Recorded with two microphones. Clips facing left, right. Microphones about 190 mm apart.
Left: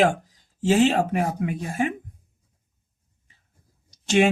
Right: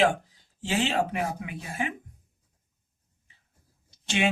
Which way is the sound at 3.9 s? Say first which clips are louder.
Left 7 dB; 45° left (ahead or behind).